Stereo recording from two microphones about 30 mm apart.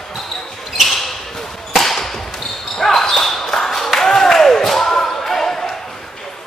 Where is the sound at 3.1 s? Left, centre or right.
Centre.